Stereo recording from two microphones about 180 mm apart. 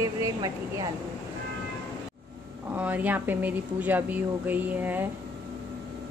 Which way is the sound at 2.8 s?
10° right (ahead or behind).